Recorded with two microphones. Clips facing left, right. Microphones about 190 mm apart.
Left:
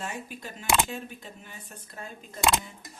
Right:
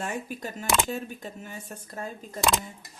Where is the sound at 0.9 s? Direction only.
45° right (ahead or behind).